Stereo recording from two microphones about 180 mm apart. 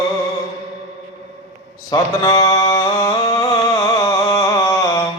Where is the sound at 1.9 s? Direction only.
20° left (ahead or behind).